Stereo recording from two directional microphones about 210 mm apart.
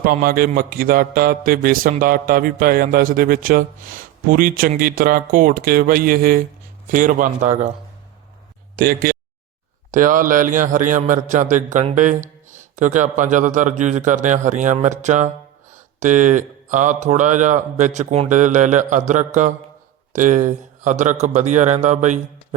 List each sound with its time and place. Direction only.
0.0 s a man's voice: 45° right (ahead or behind)
8.7 s a man's voice: 45° right (ahead or behind)